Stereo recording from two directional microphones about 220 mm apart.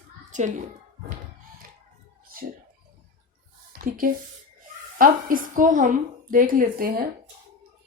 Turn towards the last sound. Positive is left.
turn(degrees=-40)  # may be behind; listen again after turning